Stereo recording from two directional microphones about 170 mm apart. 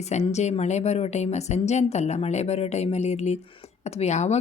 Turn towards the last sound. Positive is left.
turn(degrees=40)  # may be behind; listen again after turning